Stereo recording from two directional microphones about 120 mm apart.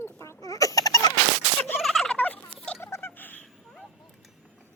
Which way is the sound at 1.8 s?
Centre (ahead or behind).